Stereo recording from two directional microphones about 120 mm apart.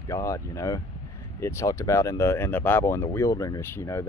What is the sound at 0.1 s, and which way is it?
Speech, 25° left (ahead or behind).